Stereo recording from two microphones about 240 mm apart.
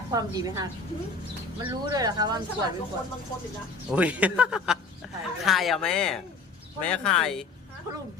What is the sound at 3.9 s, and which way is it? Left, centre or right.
Snicker, centre.